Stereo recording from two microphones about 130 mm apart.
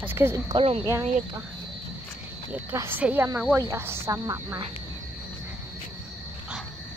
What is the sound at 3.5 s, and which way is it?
Speech, 25° right (ahead or behind).